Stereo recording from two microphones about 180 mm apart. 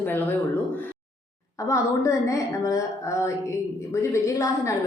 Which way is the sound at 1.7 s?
15° left (ahead or behind).